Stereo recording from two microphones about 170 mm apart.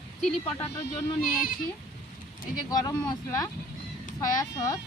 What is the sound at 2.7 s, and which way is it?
Speech, 20° left (ahead or behind).